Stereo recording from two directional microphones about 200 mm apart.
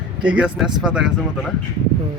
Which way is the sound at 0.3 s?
5° right (ahead or behind).